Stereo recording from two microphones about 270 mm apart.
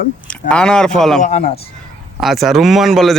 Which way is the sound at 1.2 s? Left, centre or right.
Left.